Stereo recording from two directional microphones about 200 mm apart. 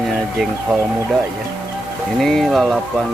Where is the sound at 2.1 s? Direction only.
Centre (ahead or behind).